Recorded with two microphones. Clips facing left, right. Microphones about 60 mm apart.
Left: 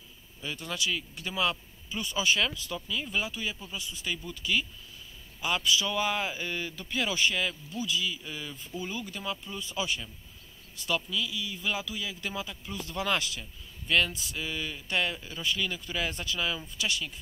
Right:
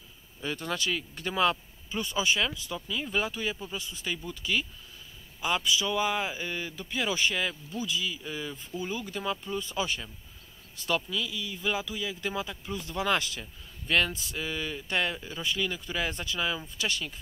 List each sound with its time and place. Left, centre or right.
0.4 s speech: right